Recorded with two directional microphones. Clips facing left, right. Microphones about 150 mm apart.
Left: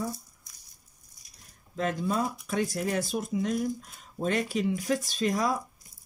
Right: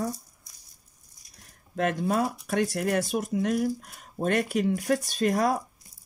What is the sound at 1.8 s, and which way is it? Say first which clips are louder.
Speech: right 3 dB; 65° right (ahead or behind).